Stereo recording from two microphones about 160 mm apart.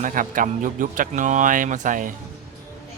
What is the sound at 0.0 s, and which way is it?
Speech, 55° right (ahead or behind).